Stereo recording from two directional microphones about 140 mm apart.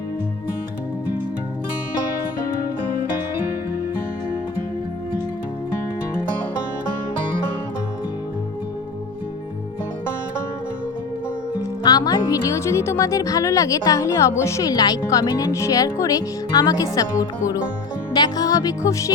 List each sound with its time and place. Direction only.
11.8 s speech: 30° left (ahead or behind)